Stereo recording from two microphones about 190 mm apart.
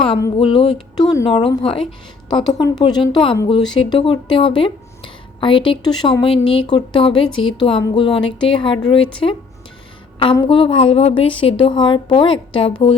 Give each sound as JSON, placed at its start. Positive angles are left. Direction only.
{"t": 0.0, "sound": "speech", "side_deg": 25}
{"t": 10.3, "sound": "speech", "side_deg": 25}